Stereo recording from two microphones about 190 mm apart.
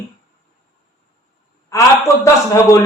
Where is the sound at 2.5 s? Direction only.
15° left (ahead or behind).